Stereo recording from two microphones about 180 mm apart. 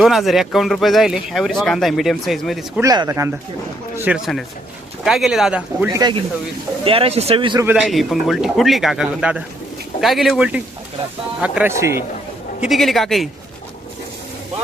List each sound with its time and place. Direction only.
0.0 s speech: centre (ahead or behind)
2.8 s speech: 20° right (ahead or behind)
5.9 s speech: 25° right (ahead or behind)
7.6 s speech: 5° right (ahead or behind)
12.6 s speech: centre (ahead or behind)